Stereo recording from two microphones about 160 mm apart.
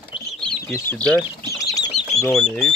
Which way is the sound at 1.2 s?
20° left (ahead or behind).